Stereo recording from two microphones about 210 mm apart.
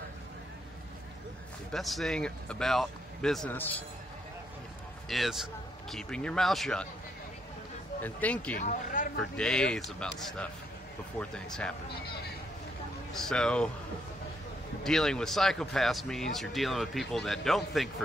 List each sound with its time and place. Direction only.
1.7 s speech: centre (ahead or behind)
5.0 s speech: centre (ahead or behind)
8.0 s speech: 5° left (ahead or behind)
8.5 s speech: 40° left (ahead or behind)
9.4 s speech: 5° left (ahead or behind)
13.1 s speech: centre (ahead or behind)
14.8 s speech: centre (ahead or behind)